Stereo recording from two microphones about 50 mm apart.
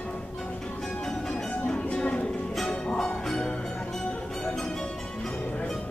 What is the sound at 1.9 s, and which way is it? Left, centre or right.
Music, left.